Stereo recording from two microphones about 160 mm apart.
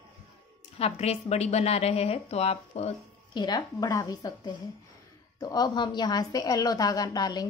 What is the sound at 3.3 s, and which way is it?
A woman's voice, 25° left (ahead or behind).